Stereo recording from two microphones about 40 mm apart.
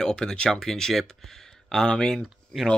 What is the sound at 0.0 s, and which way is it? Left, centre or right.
Speech, centre.